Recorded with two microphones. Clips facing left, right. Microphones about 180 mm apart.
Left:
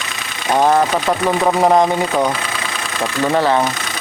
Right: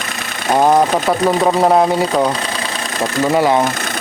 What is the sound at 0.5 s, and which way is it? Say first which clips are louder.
Speech: right 2 dB; 10° right (ahead or behind).